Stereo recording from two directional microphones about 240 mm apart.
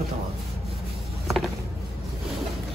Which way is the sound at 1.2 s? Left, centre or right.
Centre.